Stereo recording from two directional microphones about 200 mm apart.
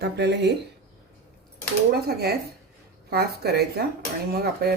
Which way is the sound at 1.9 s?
50° right (ahead or behind).